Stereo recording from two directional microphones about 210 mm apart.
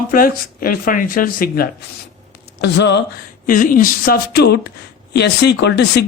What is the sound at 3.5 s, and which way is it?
Speech, 40° left (ahead or behind).